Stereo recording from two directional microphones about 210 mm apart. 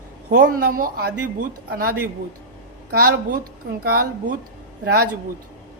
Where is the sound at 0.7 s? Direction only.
45° right (ahead or behind).